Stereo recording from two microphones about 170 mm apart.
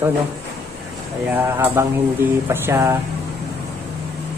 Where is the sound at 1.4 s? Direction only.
15° right (ahead or behind).